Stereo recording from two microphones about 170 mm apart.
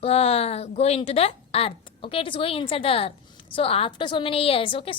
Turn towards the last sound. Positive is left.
turn(degrees=30)  # may be behind; listen again after turning